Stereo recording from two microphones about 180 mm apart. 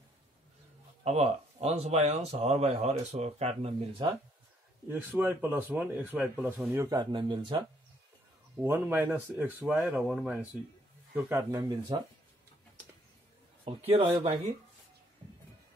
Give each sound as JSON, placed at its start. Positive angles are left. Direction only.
{"t": 1.0, "sound": "speech", "side_deg": -35}
{"t": 4.8, "sound": "speech", "side_deg": -10}
{"t": 6.8, "sound": "speech", "side_deg": -20}
{"t": 8.5, "sound": "speech", "side_deg": -10}
{"t": 13.7, "sound": "speech", "side_deg": -35}